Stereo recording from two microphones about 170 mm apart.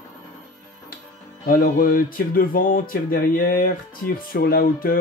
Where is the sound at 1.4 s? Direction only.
55° left (ahead or behind).